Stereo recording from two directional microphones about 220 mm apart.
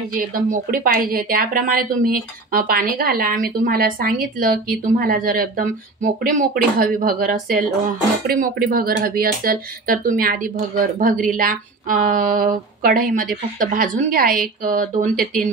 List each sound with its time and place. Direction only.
0.1 s speech: 40° right (ahead or behind)